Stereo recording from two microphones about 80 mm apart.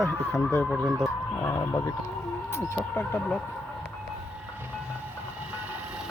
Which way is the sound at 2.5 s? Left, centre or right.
Left.